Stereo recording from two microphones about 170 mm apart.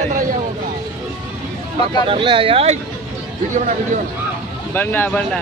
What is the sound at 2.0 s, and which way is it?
Speech, 30° right (ahead or behind).